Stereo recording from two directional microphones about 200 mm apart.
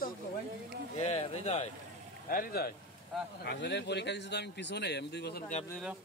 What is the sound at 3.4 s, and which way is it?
A man's voice, 60° left (ahead or behind).